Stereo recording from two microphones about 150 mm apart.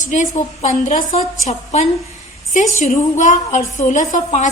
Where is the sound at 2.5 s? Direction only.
55° left (ahead or behind).